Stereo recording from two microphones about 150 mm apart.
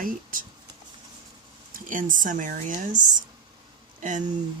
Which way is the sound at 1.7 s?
60° right (ahead or behind).